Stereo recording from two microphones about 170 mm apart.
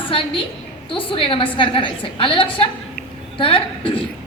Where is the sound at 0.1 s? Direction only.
30° left (ahead or behind).